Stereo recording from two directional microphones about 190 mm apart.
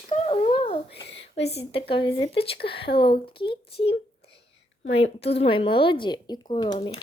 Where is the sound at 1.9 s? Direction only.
25° left (ahead or behind).